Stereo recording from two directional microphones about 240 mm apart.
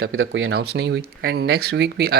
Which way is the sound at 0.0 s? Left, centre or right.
Right.